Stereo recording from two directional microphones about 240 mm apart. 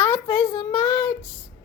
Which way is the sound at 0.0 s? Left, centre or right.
Centre.